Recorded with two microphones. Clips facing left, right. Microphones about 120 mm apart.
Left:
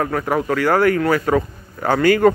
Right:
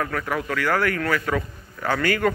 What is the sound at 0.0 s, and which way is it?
Speech, 35° left (ahead or behind).